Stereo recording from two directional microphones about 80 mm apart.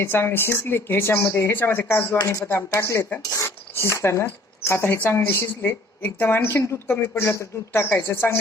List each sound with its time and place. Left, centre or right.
0.0 s a woman's voice: left